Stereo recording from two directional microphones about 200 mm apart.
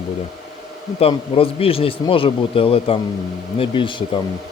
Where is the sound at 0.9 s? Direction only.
30° left (ahead or behind).